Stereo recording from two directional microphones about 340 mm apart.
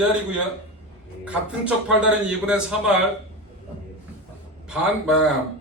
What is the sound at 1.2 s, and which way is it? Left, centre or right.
A man's voice, centre.